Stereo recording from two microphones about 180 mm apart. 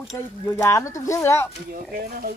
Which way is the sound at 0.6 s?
15° left (ahead or behind).